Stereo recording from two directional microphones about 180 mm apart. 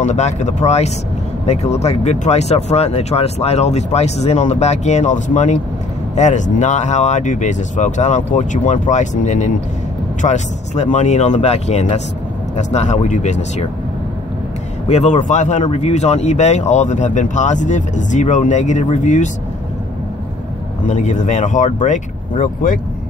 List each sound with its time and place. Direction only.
0.0 s speech: 40° left (ahead or behind)
14.9 s speech: 40° left (ahead or behind)
20.8 s speech: 40° left (ahead or behind)